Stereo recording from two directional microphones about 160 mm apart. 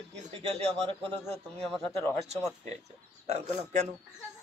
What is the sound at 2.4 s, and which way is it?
Speech, 15° left (ahead or behind).